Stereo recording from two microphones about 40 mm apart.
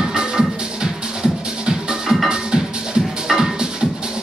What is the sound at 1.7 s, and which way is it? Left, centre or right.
Music, centre.